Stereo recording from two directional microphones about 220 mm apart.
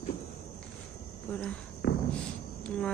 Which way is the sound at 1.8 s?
50° left (ahead or behind).